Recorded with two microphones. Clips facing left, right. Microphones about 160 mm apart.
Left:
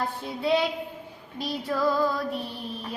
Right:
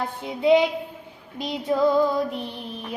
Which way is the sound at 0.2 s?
20° right (ahead or behind).